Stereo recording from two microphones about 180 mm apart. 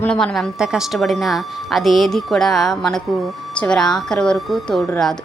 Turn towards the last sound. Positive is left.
turn(degrees=0)  # may be behind; listen again after turning